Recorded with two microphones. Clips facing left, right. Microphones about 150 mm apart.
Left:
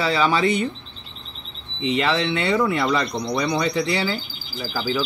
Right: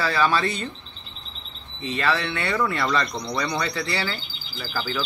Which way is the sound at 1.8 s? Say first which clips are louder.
Left 4 dB; 15° left (ahead or behind).